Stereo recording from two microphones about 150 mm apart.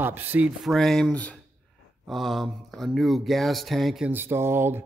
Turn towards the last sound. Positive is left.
turn(degrees=-15)  # may be behind; listen again after turning